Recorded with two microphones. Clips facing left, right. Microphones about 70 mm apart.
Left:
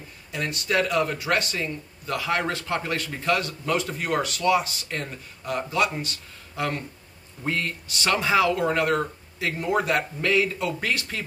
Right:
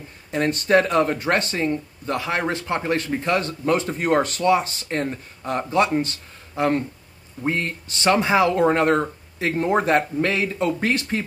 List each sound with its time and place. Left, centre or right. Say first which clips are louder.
0.3 s speech: right 8 dB; right